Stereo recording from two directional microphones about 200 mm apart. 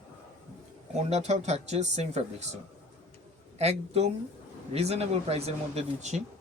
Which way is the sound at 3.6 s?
30° right (ahead or behind).